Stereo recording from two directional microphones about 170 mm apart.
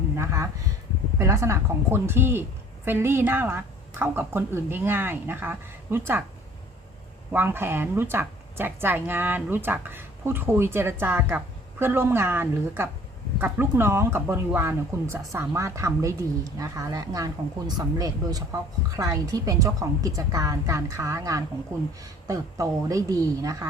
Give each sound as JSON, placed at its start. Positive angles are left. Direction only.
{"t": 0.2, "sound": "a woman's voice", "side_deg": -15}
{"t": 7.3, "sound": "a woman's voice", "side_deg": -15}